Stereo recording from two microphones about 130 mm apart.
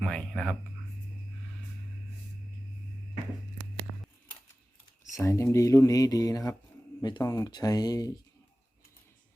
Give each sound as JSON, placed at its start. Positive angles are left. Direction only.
{"t": 0.0, "sound": "speech", "side_deg": 5}
{"t": 5.2, "sound": "speech", "side_deg": 20}